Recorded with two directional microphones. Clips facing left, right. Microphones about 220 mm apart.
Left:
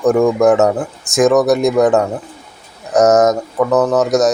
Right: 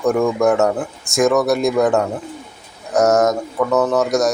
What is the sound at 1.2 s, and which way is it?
Speech, 20° left (ahead or behind).